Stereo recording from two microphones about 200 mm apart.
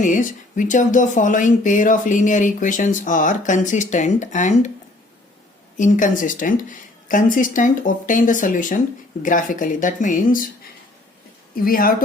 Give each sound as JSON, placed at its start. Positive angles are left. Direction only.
{"t": 0.0, "sound": "speech", "side_deg": 40}
{"t": 5.7, "sound": "speech", "side_deg": 40}
{"t": 11.6, "sound": "speech", "side_deg": 45}